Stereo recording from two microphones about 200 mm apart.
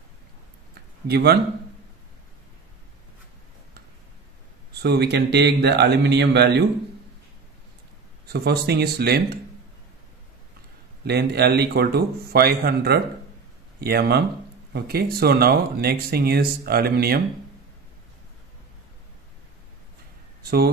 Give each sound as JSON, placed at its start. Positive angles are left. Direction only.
{"t": 1.0, "sound": "speech", "side_deg": -55}
{"t": 4.8, "sound": "speech", "side_deg": -55}
{"t": 8.3, "sound": "speech", "side_deg": -55}
{"t": 11.1, "sound": "speech", "side_deg": -55}
{"t": 20.4, "sound": "speech", "side_deg": -50}